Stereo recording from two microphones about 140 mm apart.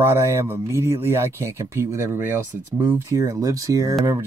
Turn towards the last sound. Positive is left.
turn(degrees=-25)  # may be behind; listen again after turning